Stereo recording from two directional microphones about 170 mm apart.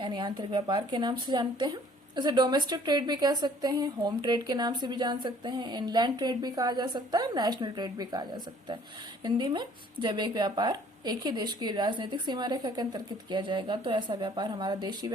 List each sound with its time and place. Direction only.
0.0 s speech: 25° right (ahead or behind)